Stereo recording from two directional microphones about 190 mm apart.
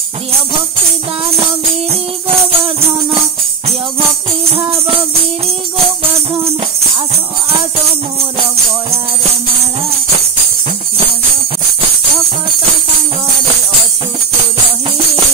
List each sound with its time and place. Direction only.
1.9 s music: 30° right (ahead or behind)
4.6 s music: 30° right (ahead or behind)